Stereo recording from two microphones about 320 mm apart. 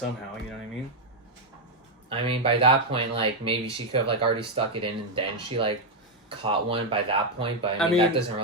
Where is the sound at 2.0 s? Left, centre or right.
Centre.